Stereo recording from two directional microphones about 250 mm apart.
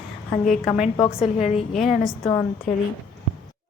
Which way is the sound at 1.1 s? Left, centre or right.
Left.